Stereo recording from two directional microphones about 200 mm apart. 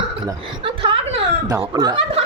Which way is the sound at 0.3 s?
25° right (ahead or behind).